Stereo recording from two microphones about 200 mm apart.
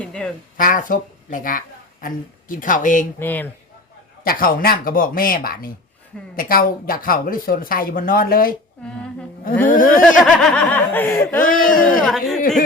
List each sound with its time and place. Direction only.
0.0 s speech: 5° left (ahead or behind)
0.5 s speech: 45° left (ahead or behind)
3.2 s speech: 10° left (ahead or behind)
4.2 s speech: 45° left (ahead or behind)
9.6 s speech: 40° left (ahead or behind)
10.0 s speech: 5° left (ahead or behind)
11.4 s speech: 45° left (ahead or behind)
12.0 s speech: centre (ahead or behind)